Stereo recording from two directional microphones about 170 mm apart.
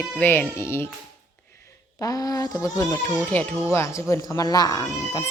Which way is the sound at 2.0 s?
20° left (ahead or behind).